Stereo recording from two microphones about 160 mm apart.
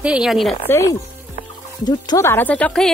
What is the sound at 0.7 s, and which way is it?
Speech, 20° left (ahead or behind).